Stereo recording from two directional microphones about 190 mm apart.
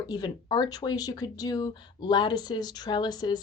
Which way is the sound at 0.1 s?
20° left (ahead or behind).